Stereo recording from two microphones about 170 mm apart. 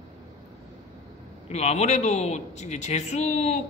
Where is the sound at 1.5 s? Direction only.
40° left (ahead or behind).